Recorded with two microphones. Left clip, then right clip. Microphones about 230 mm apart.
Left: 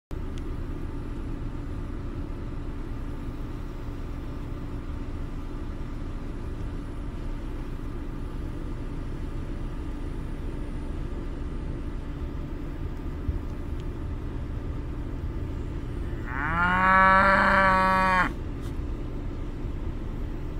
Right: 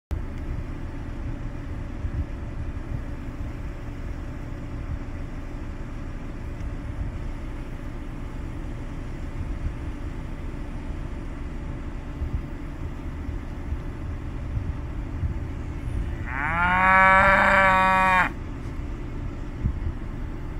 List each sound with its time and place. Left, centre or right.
16.3 s livestock: right